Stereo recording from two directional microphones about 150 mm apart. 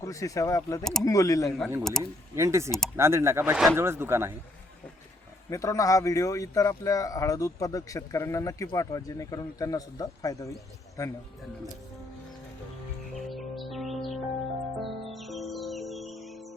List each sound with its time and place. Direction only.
0.0 s speech: 20° left (ahead or behind)
1.8 s speech: centre (ahead or behind)
2.3 s speech: 20° right (ahead or behind)
3.5 s speech: centre (ahead or behind)
3.8 s speech: 15° right (ahead or behind)
5.5 s speech: 20° left (ahead or behind)
13.1 s music: centre (ahead or behind)